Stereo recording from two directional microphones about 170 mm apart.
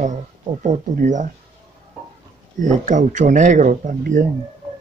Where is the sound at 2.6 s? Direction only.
45° right (ahead or behind).